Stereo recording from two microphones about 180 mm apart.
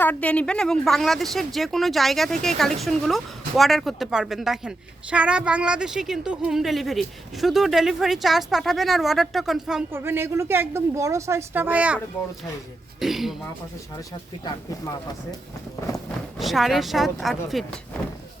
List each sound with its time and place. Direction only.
0.0 s speech: 10° left (ahead or behind); by 11.9 s 10° right (ahead or behind)
13.0 s speech: centre (ahead or behind)
14.4 s speech: 20° left (ahead or behind)
16.4 s speech: centre (ahead or behind)